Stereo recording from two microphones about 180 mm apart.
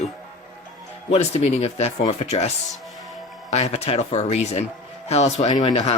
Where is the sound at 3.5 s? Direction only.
35° left (ahead or behind).